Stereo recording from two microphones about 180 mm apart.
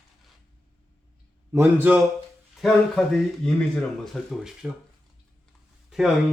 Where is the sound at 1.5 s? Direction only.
10° right (ahead or behind).